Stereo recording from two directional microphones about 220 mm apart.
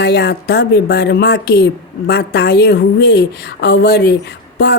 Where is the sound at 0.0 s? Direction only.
50° left (ahead or behind).